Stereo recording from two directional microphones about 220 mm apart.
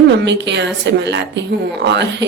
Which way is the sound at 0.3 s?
50° right (ahead or behind).